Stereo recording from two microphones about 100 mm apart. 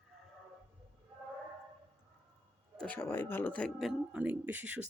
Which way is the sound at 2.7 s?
10° left (ahead or behind).